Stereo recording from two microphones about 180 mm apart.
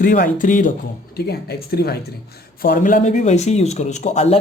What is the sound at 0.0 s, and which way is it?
Speech, 50° left (ahead or behind).